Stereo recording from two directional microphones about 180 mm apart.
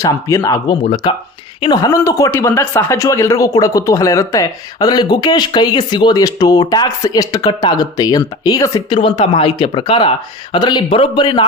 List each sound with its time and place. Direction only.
0.0 s speech: 15° left (ahead or behind)